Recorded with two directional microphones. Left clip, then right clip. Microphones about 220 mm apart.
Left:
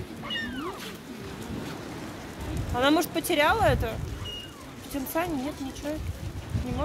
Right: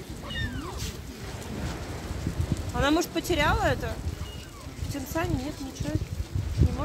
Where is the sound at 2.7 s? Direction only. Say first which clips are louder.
Left 2 dB; 50° left (ahead or behind).